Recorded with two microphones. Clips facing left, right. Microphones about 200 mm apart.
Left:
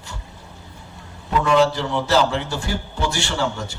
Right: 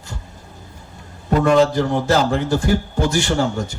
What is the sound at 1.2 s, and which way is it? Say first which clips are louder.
A man's voice: right 3 dB; 45° right (ahead or behind).